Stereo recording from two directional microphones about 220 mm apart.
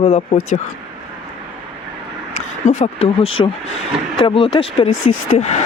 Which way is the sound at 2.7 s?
30° left (ahead or behind).